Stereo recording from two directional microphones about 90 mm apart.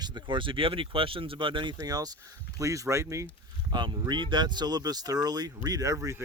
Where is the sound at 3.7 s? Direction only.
60° right (ahead or behind).